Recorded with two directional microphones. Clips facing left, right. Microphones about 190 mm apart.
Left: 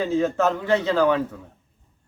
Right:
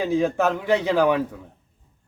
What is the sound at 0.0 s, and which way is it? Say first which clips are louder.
A man's voice: even; 15° right (ahead or behind).